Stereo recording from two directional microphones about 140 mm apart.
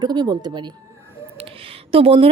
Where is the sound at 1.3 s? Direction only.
45° right (ahead or behind).